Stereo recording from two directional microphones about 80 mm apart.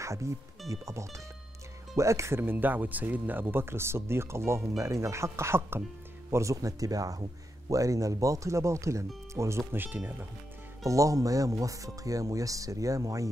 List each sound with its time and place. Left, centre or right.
0.0 s speech: right
9.8 s speech: right
10.8 s speech: right